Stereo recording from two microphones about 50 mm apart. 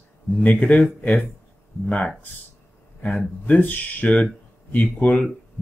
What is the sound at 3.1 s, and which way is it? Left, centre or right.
Speech, left.